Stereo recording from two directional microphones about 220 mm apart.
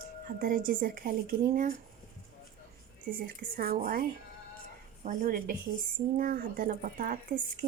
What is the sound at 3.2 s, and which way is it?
Speech, 40° right (ahead or behind).